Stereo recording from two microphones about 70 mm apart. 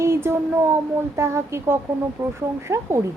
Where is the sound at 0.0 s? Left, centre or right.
Right.